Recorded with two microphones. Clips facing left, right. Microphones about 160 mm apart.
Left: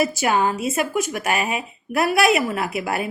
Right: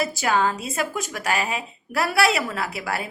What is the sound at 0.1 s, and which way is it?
A woman's voice, 20° left (ahead or behind).